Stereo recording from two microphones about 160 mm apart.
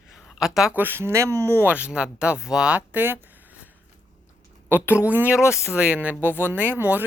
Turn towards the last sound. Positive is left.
turn(degrees=-10)  # may be behind; listen again after turning